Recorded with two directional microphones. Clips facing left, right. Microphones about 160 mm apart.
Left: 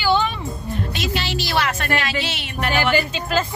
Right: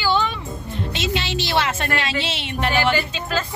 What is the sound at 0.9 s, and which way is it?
A woman's voice, 25° right (ahead or behind).